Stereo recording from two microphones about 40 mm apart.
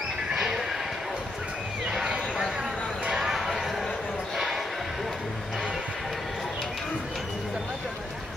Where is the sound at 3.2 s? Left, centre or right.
Centre.